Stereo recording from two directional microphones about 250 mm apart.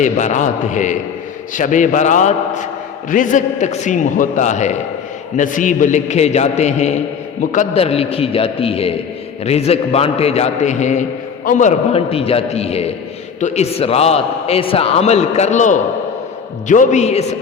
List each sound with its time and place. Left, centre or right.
0.0 s a man's voice: left